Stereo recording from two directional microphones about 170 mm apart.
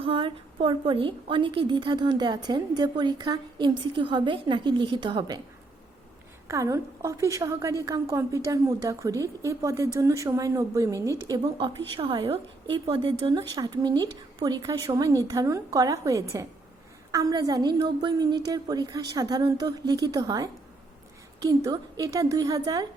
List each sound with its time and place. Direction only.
0.0 s a woman's voice: 30° right (ahead or behind)
6.5 s a woman's voice: 20° right (ahead or behind)
11.4 s a woman's voice: 30° right (ahead or behind)